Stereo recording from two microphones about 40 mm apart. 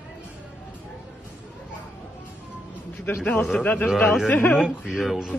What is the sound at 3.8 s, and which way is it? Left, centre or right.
Speech, left.